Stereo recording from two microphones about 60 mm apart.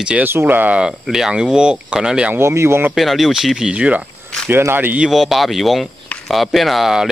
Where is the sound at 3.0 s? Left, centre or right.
Centre.